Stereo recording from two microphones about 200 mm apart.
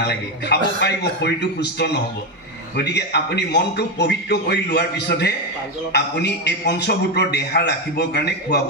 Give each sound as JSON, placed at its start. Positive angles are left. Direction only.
{"t": 0.0, "sound": "a man's voice", "side_deg": 55}